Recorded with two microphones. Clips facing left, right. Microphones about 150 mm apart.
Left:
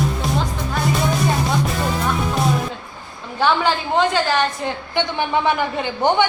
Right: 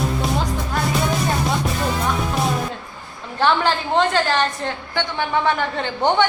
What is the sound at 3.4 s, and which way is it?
A woman's voice, 5° left (ahead or behind).